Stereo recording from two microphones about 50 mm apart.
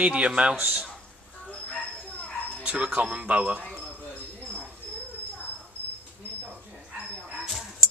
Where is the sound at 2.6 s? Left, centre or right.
Right.